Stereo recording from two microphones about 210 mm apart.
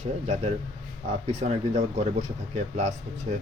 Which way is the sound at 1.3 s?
35° right (ahead or behind).